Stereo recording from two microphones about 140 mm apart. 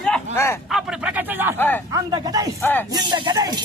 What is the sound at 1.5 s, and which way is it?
Speech, 15° left (ahead or behind).